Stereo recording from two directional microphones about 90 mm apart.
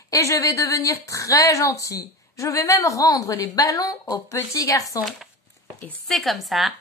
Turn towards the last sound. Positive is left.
turn(degrees=0)  # may be behind; listen again after turning